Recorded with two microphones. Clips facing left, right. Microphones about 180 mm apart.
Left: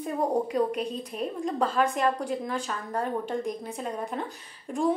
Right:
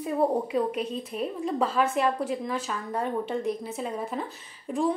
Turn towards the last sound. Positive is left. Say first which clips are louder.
# right 2 dB
turn(degrees=0)  # may be behind; listen again after turning